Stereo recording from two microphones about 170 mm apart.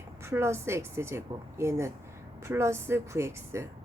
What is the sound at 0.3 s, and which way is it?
A woman's voice, 15° right (ahead or behind).